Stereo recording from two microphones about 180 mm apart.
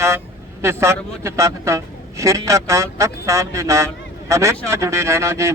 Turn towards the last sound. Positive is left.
turn(degrees=-15)  # may be behind; listen again after turning